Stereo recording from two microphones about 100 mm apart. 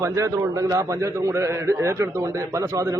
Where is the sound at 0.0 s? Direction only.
30° right (ahead or behind).